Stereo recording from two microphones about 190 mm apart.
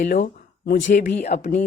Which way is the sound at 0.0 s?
50° left (ahead or behind).